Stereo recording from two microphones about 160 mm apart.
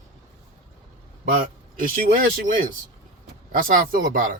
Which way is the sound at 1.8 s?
60° right (ahead or behind).